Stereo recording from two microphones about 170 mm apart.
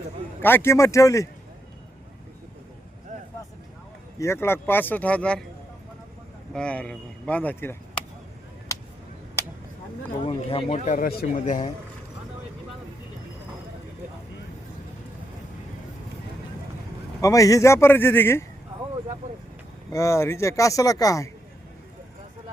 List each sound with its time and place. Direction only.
0.4 s speech: 15° left (ahead or behind)
4.2 s speech: 15° left (ahead or behind)
6.5 s speech: 5° left (ahead or behind)
10.2 s speech: 35° left (ahead or behind)
10.8 s speech: 55° left (ahead or behind)
17.2 s speech: 20° left (ahead or behind)
19.9 s speech: 20° left (ahead or behind)